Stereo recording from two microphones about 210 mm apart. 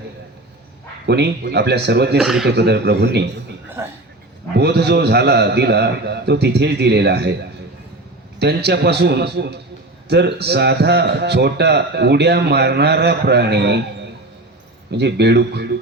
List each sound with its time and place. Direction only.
1.0 s a man's voice: 50° right (ahead or behind)
2.1 s speech: centre (ahead or behind)
2.5 s a man's voice: 50° right (ahead or behind)
4.5 s a man's voice: 50° right (ahead or behind)
8.4 s a man's voice: 50° right (ahead or behind)
14.9 s a man's voice: 55° right (ahead or behind)